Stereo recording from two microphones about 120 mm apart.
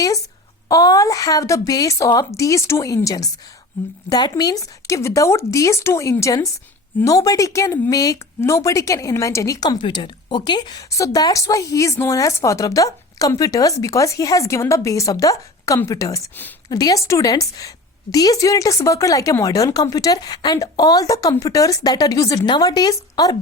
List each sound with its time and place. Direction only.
0.7 s speech: 30° left (ahead or behind)